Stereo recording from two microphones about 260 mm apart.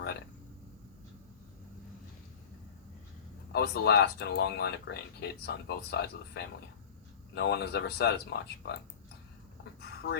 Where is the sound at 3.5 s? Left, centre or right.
Left.